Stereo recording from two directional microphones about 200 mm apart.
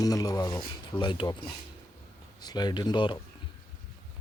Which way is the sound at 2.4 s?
20° left (ahead or behind).